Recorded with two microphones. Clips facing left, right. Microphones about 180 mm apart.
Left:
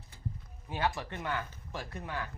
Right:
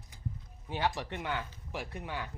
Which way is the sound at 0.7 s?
20° right (ahead or behind).